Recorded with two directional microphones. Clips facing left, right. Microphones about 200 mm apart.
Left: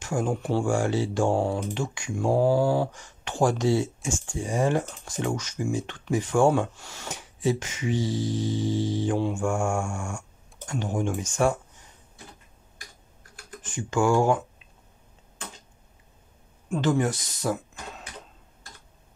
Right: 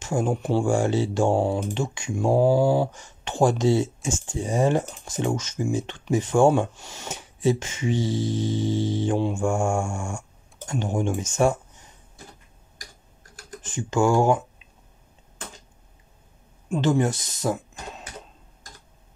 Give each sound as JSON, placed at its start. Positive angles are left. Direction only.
{"t": 0.0, "sound": "speech", "side_deg": -25}
{"t": 13.6, "sound": "speech", "side_deg": -25}
{"t": 16.7, "sound": "speech", "side_deg": -25}